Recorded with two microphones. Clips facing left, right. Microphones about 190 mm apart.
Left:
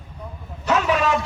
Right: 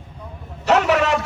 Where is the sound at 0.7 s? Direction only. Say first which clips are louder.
Right 3 dB; 70° right (ahead or behind).